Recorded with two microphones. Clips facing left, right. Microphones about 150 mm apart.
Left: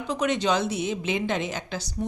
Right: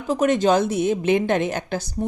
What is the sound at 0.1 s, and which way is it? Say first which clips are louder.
A woman's voice: right 7 dB; 45° right (ahead or behind).